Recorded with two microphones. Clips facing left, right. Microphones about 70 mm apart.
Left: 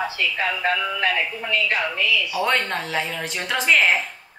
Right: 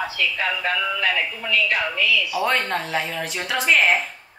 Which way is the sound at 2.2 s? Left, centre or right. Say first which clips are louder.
Even; centre.